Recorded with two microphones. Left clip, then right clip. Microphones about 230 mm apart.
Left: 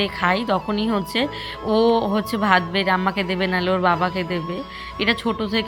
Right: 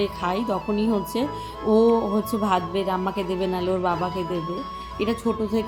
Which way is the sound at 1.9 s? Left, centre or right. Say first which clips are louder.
Left 2 dB; left.